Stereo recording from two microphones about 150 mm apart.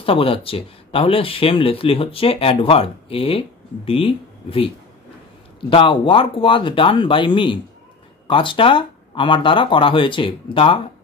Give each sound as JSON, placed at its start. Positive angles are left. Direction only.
{"t": 0.0, "sound": "speech", "side_deg": 40}
{"t": 5.7, "sound": "speech", "side_deg": 35}